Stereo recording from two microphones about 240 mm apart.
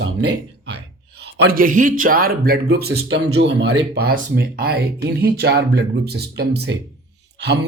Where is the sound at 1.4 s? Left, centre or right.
Right.